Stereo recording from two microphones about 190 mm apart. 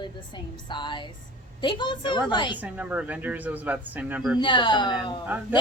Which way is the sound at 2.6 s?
10° right (ahead or behind).